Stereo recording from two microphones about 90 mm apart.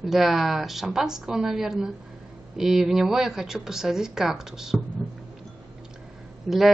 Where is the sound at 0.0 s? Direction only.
Centre (ahead or behind).